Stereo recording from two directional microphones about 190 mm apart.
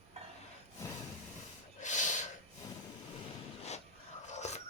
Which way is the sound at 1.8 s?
40° left (ahead or behind).